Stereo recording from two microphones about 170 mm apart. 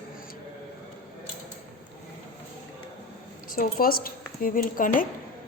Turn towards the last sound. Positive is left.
turn(degrees=55)  # may be behind; listen again after turning